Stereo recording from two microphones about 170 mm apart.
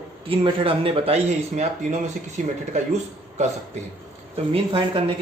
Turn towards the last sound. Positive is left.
turn(degrees=-30)  # may be behind; listen again after turning